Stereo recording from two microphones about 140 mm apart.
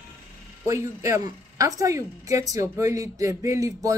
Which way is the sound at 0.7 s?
20° right (ahead or behind).